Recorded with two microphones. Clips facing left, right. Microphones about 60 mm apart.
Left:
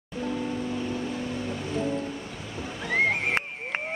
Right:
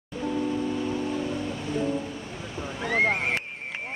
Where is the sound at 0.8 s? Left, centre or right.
Centre.